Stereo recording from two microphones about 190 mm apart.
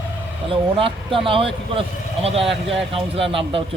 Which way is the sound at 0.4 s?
30° right (ahead or behind).